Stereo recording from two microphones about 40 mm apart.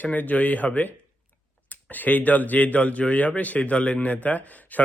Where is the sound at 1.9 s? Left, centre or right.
Left.